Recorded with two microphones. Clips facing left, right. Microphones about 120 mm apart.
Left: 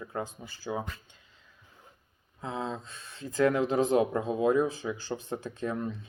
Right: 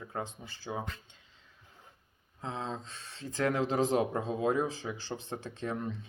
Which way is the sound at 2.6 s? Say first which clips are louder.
Left 3 dB; 35° right (ahead or behind).